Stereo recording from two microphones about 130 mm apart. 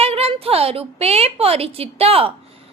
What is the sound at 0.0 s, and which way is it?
A woman's voice, 50° right (ahead or behind).